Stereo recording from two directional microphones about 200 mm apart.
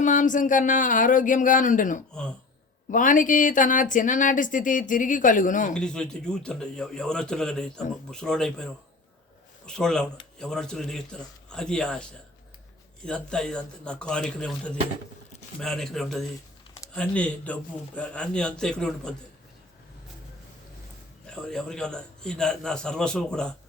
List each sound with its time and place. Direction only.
0.0 s speech: 40° left (ahead or behind)
5.8 s a man's voice: 5° left (ahead or behind)
13.1 s a man's voice: 5° left (ahead or behind)
21.2 s a man's voice: 5° left (ahead or behind)